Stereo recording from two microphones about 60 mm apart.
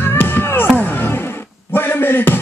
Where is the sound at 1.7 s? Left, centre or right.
Left.